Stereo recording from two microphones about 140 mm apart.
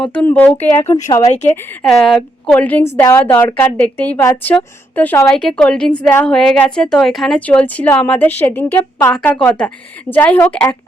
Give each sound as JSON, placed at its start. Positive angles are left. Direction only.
{"t": 0.0, "sound": "a woman's voice", "side_deg": 10}
{"t": 1.8, "sound": "a woman's voice", "side_deg": 5}
{"t": 4.2, "sound": "a woman's voice", "side_deg": 20}
{"t": 5.3, "sound": "a woman's voice", "side_deg": 5}